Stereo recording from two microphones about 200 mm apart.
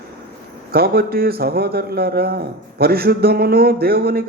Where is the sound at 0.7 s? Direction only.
50° right (ahead or behind).